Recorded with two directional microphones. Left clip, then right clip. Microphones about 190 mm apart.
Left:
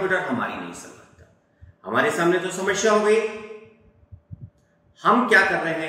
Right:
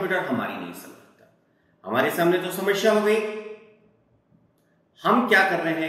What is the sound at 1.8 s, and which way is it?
A man's voice, centre (ahead or behind).